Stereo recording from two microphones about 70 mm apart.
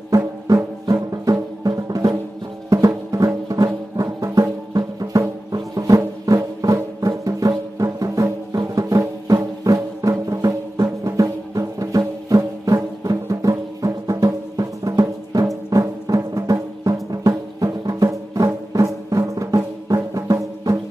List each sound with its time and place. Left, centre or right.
0.1 s music: right